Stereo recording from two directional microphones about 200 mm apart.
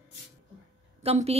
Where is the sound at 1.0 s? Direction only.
30° right (ahead or behind).